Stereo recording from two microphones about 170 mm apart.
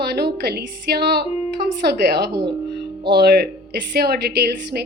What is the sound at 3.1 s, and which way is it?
A woman's voice, 70° right (ahead or behind).